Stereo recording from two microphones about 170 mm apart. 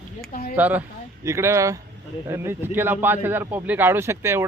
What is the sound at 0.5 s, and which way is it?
A man's voice, 10° right (ahead or behind).